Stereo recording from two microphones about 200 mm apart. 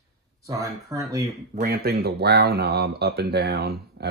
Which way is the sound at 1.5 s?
50° right (ahead or behind).